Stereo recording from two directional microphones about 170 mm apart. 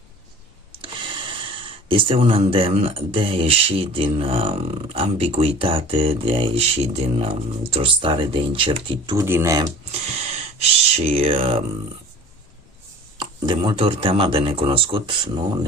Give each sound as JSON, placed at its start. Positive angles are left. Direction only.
{"t": 0.8, "sound": "speech", "side_deg": -30}
{"t": 9.2, "sound": "speech", "side_deg": -15}
{"t": 9.9, "sound": "speech", "side_deg": -35}
{"t": 13.1, "sound": "speech", "side_deg": -30}